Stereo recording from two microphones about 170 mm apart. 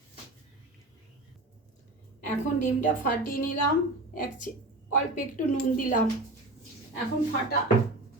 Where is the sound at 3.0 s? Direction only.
55° left (ahead or behind).